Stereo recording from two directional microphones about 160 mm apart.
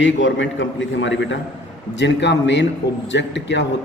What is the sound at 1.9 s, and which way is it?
A man's voice, 90° left.